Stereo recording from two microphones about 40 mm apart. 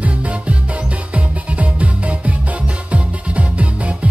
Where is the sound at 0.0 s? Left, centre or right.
Right.